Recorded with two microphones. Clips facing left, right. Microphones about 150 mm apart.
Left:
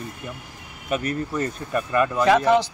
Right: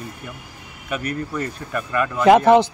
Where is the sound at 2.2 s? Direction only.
55° right (ahead or behind).